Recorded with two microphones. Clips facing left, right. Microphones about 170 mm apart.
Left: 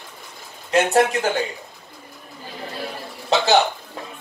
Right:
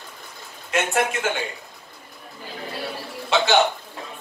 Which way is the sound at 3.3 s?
40° left (ahead or behind).